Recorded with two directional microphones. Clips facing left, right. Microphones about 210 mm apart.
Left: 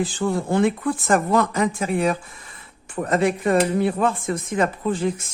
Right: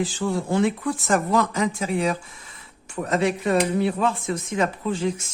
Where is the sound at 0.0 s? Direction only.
55° left (ahead or behind).